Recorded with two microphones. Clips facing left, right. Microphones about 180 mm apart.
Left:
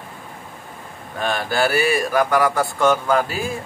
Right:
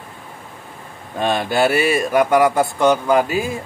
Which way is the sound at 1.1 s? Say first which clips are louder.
Right 3 dB; 20° right (ahead or behind).